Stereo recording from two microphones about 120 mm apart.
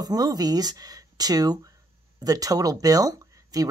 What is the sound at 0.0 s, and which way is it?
Speech, 35° right (ahead or behind).